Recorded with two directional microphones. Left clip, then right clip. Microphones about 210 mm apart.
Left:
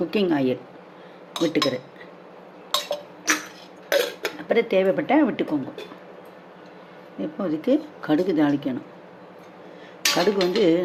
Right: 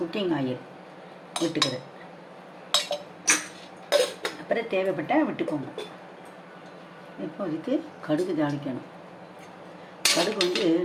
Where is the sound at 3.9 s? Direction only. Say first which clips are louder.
Left 1 dB; 45° left (ahead or behind).